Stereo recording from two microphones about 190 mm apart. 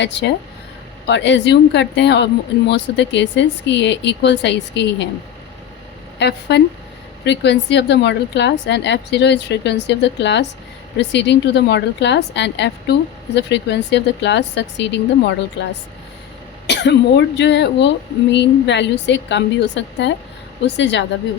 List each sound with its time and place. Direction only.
0.0 s speech: 65° left (ahead or behind)
6.1 s a woman's voice: 65° left (ahead or behind)
16.6 s speech: 65° left (ahead or behind)